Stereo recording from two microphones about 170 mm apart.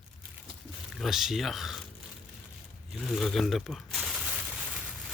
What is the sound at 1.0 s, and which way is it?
Speech, centre (ahead or behind).